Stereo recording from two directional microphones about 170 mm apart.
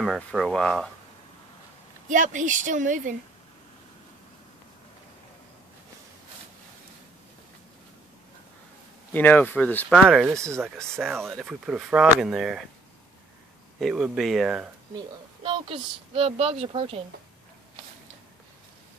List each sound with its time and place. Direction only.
0.0 s speech: centre (ahead or behind)
2.0 s a woman's voice: 50° right (ahead or behind)
9.1 s speech: 10° left (ahead or behind)
9.9 s speech: centre (ahead or behind)
10.5 s speech: 15° right (ahead or behind)
11.0 s speech: centre (ahead or behind)
13.7 s speech: 5° right (ahead or behind)
15.0 s speech: 30° right (ahead or behind)